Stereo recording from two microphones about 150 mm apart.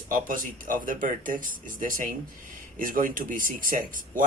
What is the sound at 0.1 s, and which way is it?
Speech, 60° right (ahead or behind).